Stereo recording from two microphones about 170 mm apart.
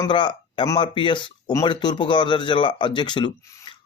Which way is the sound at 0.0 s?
30° left (ahead or behind).